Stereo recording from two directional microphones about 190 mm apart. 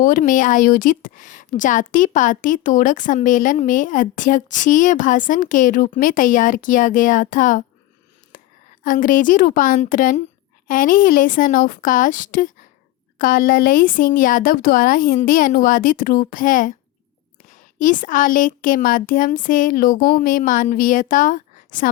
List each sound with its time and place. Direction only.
0.0 s a woman's voice: 45° left (ahead or behind)
8.3 s a sound: 45° left (ahead or behind)
8.8 s a woman's voice: 45° left (ahead or behind)